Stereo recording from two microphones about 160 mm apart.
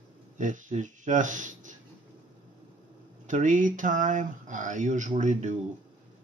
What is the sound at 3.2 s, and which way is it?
Speech, 50° right (ahead or behind).